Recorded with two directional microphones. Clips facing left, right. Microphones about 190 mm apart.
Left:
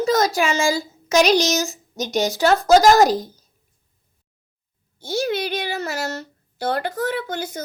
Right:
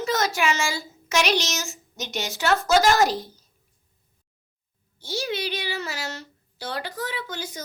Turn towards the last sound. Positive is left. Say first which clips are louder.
# left 7 dB
turn(degrees=55)  # may be behind; listen again after turning